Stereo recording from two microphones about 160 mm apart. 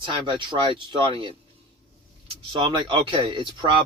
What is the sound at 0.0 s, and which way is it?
Speech, 30° right (ahead or behind).